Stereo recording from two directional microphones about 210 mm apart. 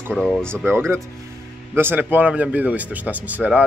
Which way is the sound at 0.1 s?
5° left (ahead or behind).